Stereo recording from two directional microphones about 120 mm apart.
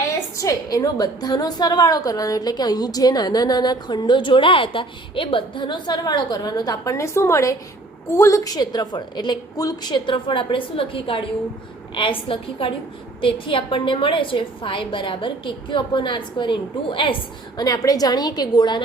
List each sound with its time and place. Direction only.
0.3 s a woman's voice: 30° left (ahead or behind); by 17.2 s 45° left (ahead or behind)
17.6 s a woman's voice: 30° left (ahead or behind)